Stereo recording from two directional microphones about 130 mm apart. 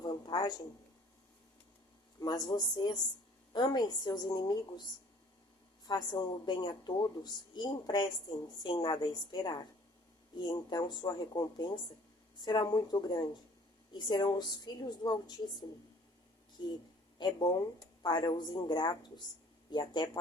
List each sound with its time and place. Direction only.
0.0 s a sound: 35° left (ahead or behind)
2.2 s speech: 30° left (ahead or behind)
5.8 s speech: 30° left (ahead or behind)
16.6 s speech: 35° left (ahead or behind)